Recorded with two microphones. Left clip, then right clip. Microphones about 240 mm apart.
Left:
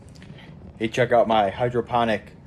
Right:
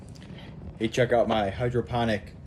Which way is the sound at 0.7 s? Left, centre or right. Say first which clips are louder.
Left 4 dB; centre.